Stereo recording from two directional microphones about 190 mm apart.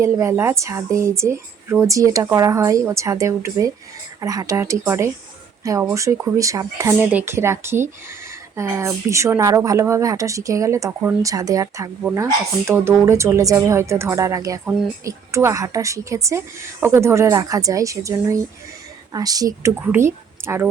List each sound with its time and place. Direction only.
0.0 s a woman's voice: 15° right (ahead or behind)